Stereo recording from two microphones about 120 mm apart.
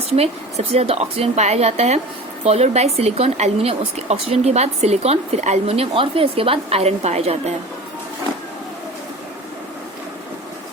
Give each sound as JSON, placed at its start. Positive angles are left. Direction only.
{"t": 0.1, "sound": "speech", "side_deg": -60}